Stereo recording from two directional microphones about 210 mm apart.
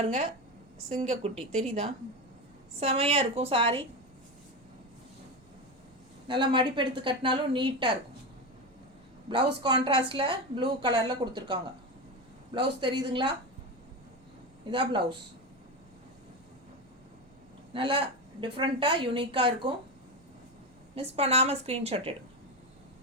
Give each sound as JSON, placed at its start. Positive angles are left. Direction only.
{"t": 0.0, "sound": "a woman's voice", "side_deg": -30}
{"t": 2.8, "sound": "a woman's voice", "side_deg": -30}
{"t": 6.2, "sound": "a woman's voice", "side_deg": -25}
{"t": 9.6, "sound": "a woman's voice", "side_deg": -20}
{"t": 12.5, "sound": "a woman's voice", "side_deg": -20}
{"t": 14.7, "sound": "a woman's voice", "side_deg": -25}
{"t": 17.7, "sound": "a woman's voice", "side_deg": -25}
{"t": 20.9, "sound": "a woman's voice", "side_deg": -30}